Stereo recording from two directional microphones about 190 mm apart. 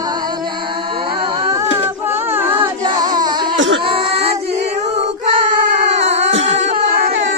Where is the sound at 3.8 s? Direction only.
30° right (ahead or behind).